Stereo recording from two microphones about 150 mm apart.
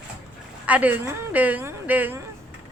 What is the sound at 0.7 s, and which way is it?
A woman's voice, 10° right (ahead or behind).